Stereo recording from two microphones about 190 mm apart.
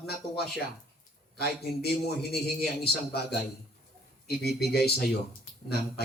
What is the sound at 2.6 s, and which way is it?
Speech, 55° left (ahead or behind).